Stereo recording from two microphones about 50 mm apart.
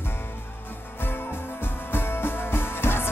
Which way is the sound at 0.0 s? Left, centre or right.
Left.